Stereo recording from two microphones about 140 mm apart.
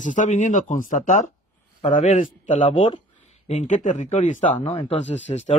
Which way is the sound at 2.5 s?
40° left (ahead or behind).